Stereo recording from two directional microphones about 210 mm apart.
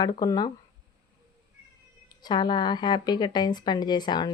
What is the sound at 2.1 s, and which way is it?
Speech, 20° left (ahead or behind).